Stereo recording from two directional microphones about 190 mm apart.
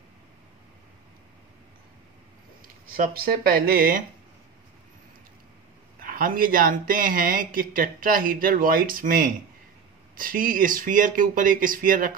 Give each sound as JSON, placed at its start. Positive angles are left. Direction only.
{"t": 2.9, "sound": "speech", "side_deg": -50}
{"t": 5.9, "sound": "speech", "side_deg": -50}